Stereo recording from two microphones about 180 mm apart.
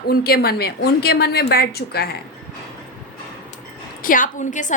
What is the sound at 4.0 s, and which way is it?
Speech, 50° left (ahead or behind).